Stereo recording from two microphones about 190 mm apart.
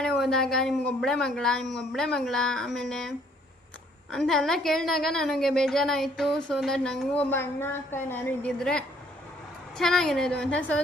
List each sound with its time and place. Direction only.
0.0 s a woman's voice: centre (ahead or behind)